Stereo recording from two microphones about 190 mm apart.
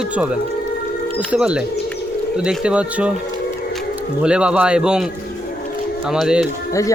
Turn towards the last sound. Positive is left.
turn(degrees=15)  # may be behind; listen again after turning